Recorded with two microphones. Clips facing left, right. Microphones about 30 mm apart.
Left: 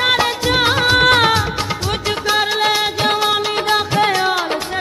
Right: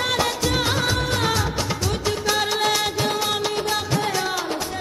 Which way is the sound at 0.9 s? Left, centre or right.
Left.